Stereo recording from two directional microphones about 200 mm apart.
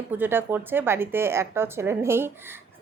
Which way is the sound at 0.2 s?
10° right (ahead or behind).